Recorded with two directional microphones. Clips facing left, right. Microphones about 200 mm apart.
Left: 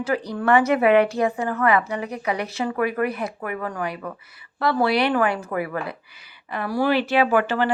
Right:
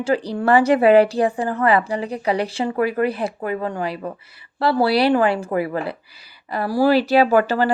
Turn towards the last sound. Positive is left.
turn(degrees=-35)  # may be behind; listen again after turning